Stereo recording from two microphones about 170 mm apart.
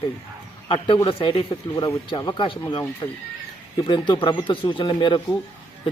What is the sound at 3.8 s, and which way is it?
A man's voice, 25° left (ahead or behind).